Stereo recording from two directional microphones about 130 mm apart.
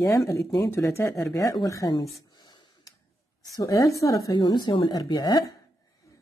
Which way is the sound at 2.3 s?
30° left (ahead or behind).